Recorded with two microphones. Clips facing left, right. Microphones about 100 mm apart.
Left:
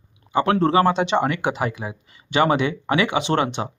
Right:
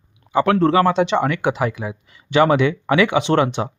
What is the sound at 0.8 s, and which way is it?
Speech, 20° left (ahead or behind).